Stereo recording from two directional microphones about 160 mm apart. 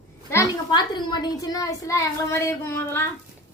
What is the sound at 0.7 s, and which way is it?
A woman's voice, 30° left (ahead or behind).